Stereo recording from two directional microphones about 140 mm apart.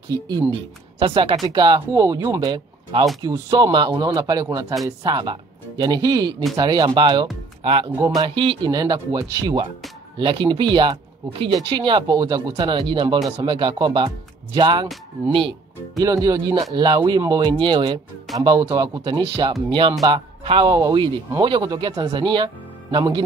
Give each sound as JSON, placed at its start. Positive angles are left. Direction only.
{"t": 0.1, "sound": "speech", "side_deg": -30}
{"t": 8.0, "sound": "speech", "side_deg": -25}
{"t": 16.0, "sound": "speech", "side_deg": -25}